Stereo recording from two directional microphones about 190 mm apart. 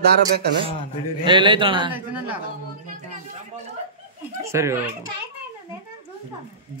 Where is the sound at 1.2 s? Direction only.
25° right (ahead or behind).